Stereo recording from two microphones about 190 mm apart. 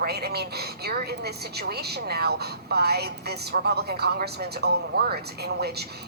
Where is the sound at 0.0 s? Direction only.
55° right (ahead or behind).